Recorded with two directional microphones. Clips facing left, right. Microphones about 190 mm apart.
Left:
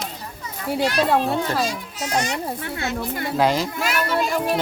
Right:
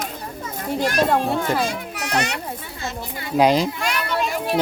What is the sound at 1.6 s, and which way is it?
Speech, 65° right (ahead or behind).